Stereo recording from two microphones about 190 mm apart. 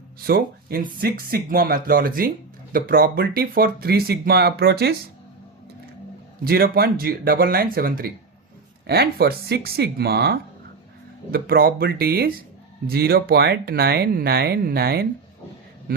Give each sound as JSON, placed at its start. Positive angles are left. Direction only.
{"t": 0.3, "sound": "speech", "side_deg": -50}
{"t": 6.4, "sound": "speech", "side_deg": -50}